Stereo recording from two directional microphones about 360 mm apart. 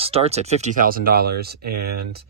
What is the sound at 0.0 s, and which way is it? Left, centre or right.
Speech, centre.